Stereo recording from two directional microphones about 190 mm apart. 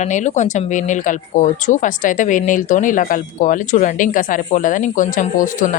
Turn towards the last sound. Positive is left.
turn(degrees=45)  # may be behind; listen again after turning